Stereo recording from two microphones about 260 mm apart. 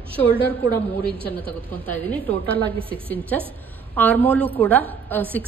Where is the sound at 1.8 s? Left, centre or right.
Centre.